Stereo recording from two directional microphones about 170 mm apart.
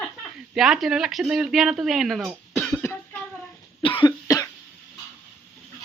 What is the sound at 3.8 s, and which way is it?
Cough, 30° left (ahead or behind).